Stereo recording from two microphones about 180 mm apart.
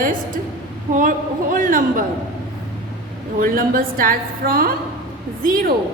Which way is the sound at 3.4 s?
50° right (ahead or behind).